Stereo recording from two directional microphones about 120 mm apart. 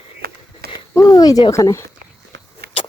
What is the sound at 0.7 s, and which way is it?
Speech, 30° left (ahead or behind).